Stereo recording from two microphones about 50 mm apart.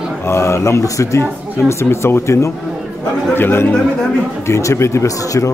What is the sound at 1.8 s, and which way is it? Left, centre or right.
Speech, left.